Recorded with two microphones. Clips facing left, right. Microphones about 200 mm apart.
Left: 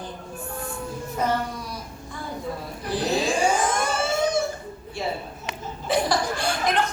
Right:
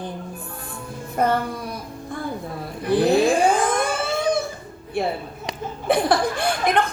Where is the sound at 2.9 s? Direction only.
55° right (ahead or behind).